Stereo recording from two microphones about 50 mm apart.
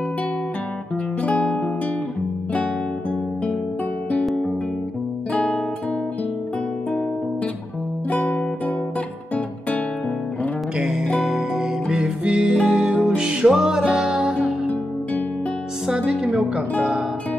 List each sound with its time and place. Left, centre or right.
1.2 s music: left
5.3 s guitar: left
8.2 s music: left
10.8 s music: centre
16.1 s a sound: right